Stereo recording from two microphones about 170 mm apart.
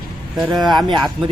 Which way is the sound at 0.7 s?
25° right (ahead or behind).